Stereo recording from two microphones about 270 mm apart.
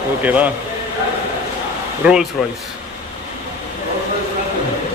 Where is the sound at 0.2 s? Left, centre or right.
Centre.